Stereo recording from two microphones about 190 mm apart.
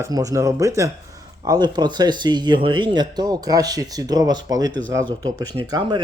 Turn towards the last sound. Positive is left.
turn(degrees=-25)  # may be behind; listen again after turning